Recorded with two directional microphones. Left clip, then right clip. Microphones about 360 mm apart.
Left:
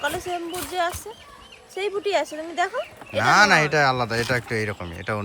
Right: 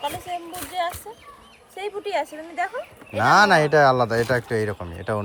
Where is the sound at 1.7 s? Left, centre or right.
Left.